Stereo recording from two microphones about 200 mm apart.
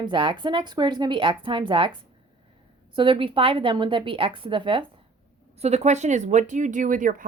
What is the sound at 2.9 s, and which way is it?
A woman's voice, 25° right (ahead or behind).